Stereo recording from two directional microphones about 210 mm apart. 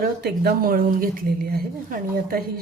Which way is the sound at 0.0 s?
50° right (ahead or behind).